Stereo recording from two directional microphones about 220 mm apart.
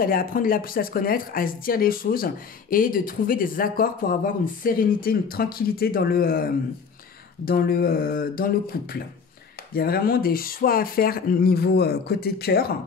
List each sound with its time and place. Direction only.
0.0 s speech: 40° left (ahead or behind)